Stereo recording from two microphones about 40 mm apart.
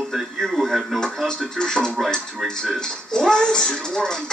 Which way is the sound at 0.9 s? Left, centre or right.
Centre.